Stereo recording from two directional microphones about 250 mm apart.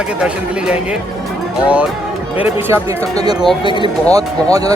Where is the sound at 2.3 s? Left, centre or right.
Centre.